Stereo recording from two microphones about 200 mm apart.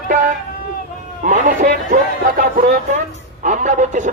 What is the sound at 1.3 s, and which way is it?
Speech, 40° right (ahead or behind).